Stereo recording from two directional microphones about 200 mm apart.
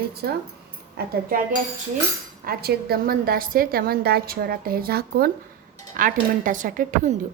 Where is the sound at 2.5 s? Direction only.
50° right (ahead or behind).